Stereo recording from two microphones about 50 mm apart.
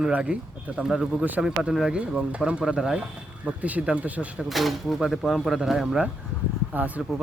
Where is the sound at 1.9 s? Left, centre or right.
Right.